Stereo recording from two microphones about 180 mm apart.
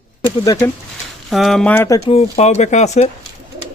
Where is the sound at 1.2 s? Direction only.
Centre (ahead or behind); by 2.0 s 15° left (ahead or behind).